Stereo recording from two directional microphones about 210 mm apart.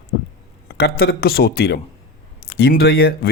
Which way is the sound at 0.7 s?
50° left (ahead or behind).